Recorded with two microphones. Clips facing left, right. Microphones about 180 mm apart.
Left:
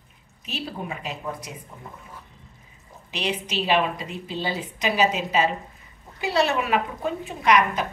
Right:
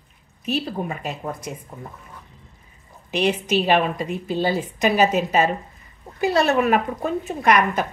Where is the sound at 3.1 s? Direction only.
50° right (ahead or behind).